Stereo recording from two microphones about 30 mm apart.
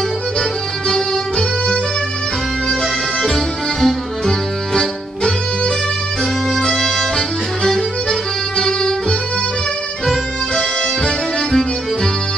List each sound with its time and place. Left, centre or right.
0.8 s music: centre
2.8 s music: centre
6.6 s music: centre
10.5 s music: left